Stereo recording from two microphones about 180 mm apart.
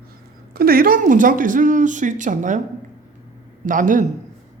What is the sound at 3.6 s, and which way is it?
Speech, 45° right (ahead or behind).